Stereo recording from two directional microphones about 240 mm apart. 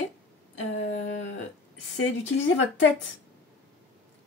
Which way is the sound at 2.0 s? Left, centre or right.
Left.